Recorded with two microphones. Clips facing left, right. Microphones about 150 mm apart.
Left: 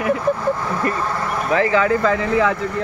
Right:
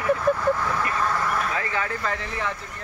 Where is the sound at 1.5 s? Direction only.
90° left.